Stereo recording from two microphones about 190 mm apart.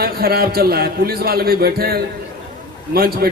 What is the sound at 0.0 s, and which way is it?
A man's voice, 50° right (ahead or behind).